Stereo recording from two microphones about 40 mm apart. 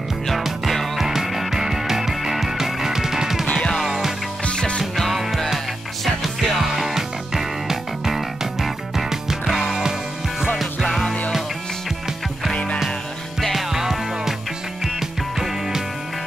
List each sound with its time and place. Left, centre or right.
0.9 s music: centre
3.5 s music: left
3.8 s music: centre
4.5 s music: left
4.9 s music: centre
6.2 s music: centre
9.5 s music: centre
10.8 s music: centre
13.4 s music: centre
13.7 s music: centre